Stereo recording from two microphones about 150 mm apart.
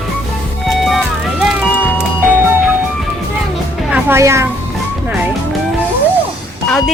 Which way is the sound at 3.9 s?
15° right (ahead or behind).